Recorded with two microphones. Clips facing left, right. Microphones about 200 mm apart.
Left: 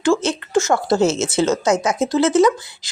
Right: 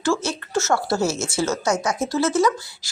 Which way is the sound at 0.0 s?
15° left (ahead or behind).